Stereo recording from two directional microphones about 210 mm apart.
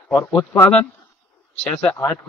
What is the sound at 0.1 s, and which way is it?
Speech, 10° left (ahead or behind).